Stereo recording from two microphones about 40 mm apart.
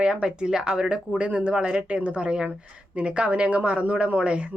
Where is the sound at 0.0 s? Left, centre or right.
Right.